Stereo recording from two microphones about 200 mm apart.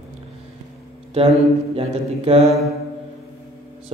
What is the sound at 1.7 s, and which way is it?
Speech, 30° right (ahead or behind).